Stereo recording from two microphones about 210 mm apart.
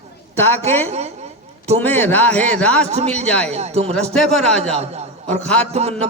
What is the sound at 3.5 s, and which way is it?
Speech, 30° right (ahead or behind).